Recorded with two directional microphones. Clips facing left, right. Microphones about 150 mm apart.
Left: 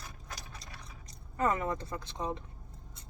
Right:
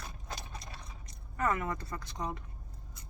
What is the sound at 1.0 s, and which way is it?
Speech, 30° left (ahead or behind).